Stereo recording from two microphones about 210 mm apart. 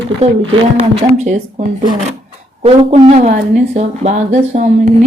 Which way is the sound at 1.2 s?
35° right (ahead or behind).